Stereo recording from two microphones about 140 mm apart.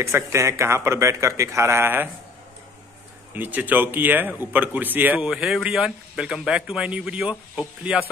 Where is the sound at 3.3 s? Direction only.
10° right (ahead or behind).